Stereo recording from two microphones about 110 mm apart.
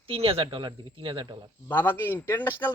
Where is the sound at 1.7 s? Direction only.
20° left (ahead or behind).